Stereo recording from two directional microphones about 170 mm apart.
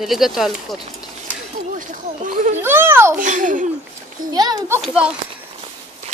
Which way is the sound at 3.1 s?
50° right (ahead or behind).